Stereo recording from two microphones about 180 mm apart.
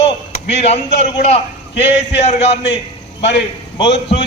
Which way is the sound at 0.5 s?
35° left (ahead or behind).